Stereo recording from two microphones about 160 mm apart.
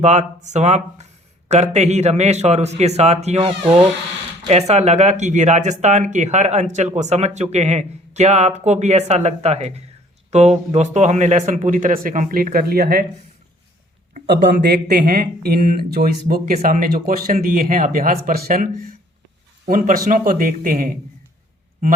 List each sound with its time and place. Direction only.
0.0 s speech: 45° right (ahead or behind); by 13.1 s 70° right (ahead or behind)
14.3 s speech: 80° right; by 20.9 s 60° right (ahead or behind)